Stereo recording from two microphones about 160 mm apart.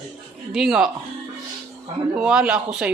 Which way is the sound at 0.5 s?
5° right (ahead or behind).